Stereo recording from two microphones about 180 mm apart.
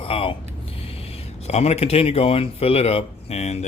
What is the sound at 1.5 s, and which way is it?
Speech, 35° left (ahead or behind).